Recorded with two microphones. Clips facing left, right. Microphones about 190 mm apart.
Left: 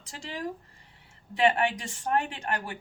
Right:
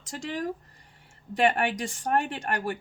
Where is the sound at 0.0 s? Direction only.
45° right (ahead or behind).